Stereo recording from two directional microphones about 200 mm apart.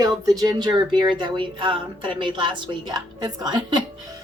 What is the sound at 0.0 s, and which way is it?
A woman's voice, 20° right (ahead or behind).